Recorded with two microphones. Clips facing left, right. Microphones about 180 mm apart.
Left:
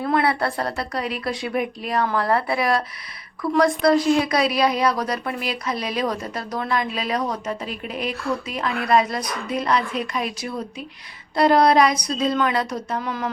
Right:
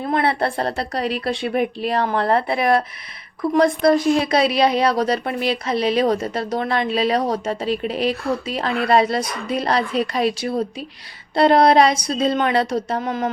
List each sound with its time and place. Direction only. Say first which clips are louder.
0.0 s a woman's voice: right 1 dB; 25° right (ahead or behind)